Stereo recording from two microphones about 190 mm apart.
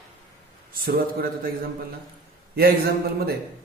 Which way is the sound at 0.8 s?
55° right (ahead or behind).